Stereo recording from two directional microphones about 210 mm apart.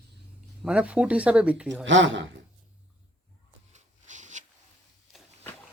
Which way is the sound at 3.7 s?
35° right (ahead or behind).